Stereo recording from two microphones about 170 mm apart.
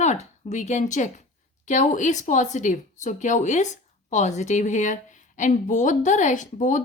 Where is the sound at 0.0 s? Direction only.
45° left (ahead or behind).